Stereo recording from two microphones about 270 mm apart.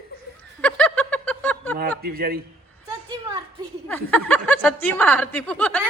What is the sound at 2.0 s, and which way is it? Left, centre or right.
Speech, right.